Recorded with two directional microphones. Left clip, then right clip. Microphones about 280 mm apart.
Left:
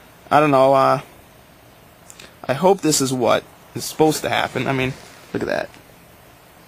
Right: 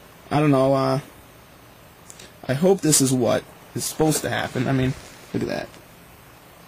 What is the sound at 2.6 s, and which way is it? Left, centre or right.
Speech, centre.